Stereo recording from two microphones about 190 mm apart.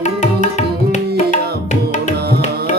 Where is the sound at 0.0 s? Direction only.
40° left (ahead or behind).